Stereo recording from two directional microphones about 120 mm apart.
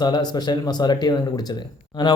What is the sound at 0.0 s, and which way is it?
Speech, 40° left (ahead or behind).